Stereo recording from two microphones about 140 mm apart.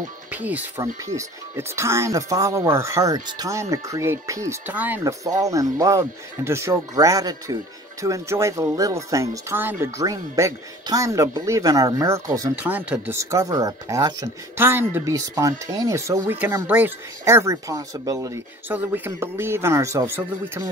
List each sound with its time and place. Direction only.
0.3 s speech: 10° right (ahead or behind)
5.0 s speech: 25° right (ahead or behind)
12.5 s speech: 10° right (ahead or behind)